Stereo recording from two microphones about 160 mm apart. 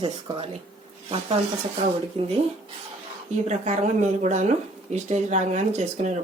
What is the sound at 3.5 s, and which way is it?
Speech, 45° right (ahead or behind).